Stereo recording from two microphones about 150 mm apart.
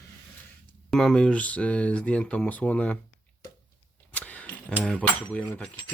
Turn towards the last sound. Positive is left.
turn(degrees=10)  # may be behind; listen again after turning